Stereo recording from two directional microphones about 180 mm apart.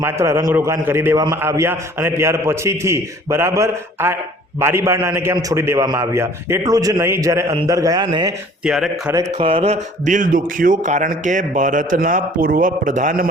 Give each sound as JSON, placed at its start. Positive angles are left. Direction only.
{"t": 0.0, "sound": "a man's voice", "side_deg": -15}
{"t": 8.6, "sound": "speech", "side_deg": -5}
{"t": 9.4, "sound": "speech", "side_deg": -30}